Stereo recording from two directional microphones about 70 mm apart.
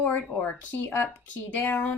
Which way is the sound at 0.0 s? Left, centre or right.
Left.